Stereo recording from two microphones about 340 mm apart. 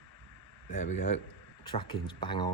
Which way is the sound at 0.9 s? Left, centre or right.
Left.